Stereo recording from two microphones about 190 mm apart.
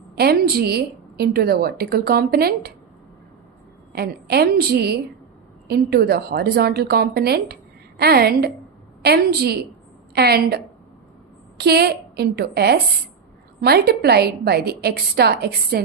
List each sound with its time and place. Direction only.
0.2 s a woman's voice: 55° right (ahead or behind)
3.9 s a woman's voice: 55° right (ahead or behind)
11.6 s a woman's voice: 60° right (ahead or behind)